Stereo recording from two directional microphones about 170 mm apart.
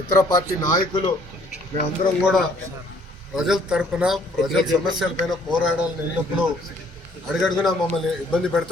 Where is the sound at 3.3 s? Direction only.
5° right (ahead or behind).